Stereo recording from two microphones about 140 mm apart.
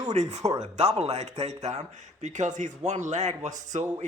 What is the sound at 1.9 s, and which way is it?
Speech, 60° right (ahead or behind).